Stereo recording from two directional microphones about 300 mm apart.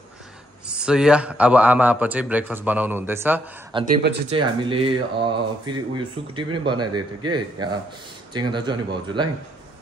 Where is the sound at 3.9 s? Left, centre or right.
Right.